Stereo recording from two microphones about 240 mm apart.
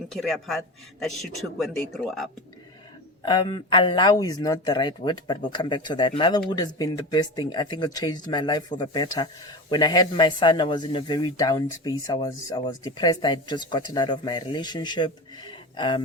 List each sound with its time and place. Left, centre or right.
0.1 s a man's voice: centre
3.2 s speech: centre